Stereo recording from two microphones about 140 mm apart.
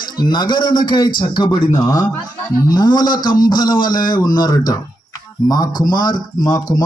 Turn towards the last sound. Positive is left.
turn(degrees=25)  # may be behind; listen again after turning